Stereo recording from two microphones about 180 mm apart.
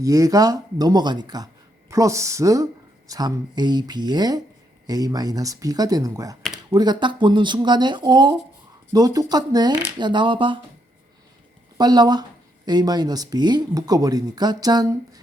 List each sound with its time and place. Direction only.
0.0 s speech: 20° right (ahead or behind)
11.8 s speech: 20° right (ahead or behind)